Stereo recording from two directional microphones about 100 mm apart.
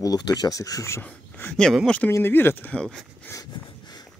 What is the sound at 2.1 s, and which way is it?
Speech, 25° left (ahead or behind).